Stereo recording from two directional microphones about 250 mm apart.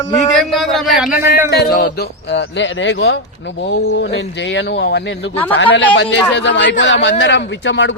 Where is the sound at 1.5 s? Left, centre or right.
Left.